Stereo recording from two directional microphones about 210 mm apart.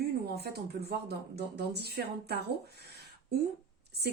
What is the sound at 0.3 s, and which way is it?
Speech, 50° right (ahead or behind).